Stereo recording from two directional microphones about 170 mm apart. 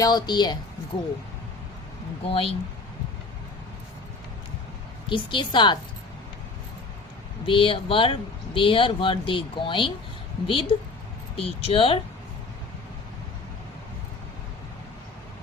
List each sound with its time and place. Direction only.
0.0 s a woman's voice: 25° left (ahead or behind)
2.2 s speech: 35° left (ahead or behind)
5.0 s a woman's voice: 30° left (ahead or behind)
7.4 s speech: 30° left (ahead or behind)